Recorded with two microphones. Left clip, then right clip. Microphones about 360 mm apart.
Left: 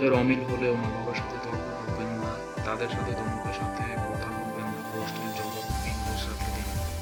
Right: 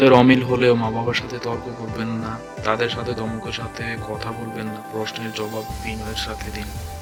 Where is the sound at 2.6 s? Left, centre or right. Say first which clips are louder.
Right 10 dB; right.